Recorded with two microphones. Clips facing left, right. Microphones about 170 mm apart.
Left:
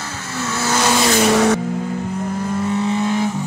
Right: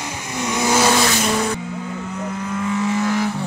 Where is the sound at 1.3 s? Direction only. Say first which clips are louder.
Left 7 dB; 75° left (ahead or behind).